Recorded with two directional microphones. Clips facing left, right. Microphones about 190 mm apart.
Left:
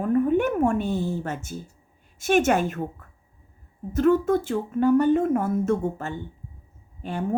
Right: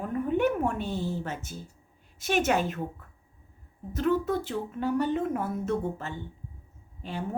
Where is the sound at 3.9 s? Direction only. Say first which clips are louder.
Left 7 dB; 45° left (ahead or behind).